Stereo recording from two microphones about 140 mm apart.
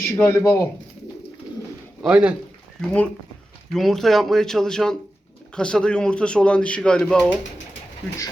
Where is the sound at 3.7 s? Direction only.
Centre (ahead or behind).